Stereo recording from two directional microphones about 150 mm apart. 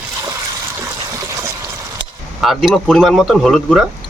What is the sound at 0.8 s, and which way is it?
Water, 20° right (ahead or behind).